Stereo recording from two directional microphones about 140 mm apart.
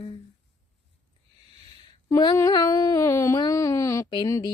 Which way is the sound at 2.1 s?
30° left (ahead or behind).